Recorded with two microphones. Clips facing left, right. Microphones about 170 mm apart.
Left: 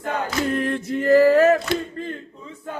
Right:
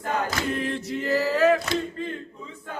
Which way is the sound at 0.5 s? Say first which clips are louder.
Left 5 dB; 50° left (ahead or behind).